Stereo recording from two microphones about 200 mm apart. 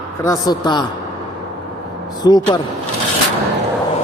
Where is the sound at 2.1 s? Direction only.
20° left (ahead or behind).